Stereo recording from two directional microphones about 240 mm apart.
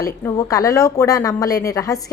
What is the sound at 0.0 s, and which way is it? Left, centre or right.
Speech, centre.